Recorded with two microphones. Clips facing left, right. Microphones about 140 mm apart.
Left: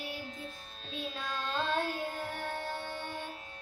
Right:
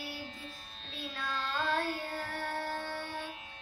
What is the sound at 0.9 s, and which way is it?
Child singing, 20° left (ahead or behind).